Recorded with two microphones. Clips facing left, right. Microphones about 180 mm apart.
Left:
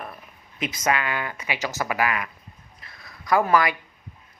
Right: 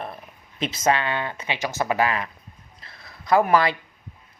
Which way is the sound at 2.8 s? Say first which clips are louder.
Right 1 dB; 25° right (ahead or behind).